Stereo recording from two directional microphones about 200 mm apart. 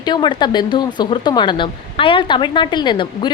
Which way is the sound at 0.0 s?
25° left (ahead or behind).